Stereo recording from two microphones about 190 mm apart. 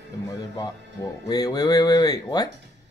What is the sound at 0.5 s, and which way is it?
Speech, 20° left (ahead or behind).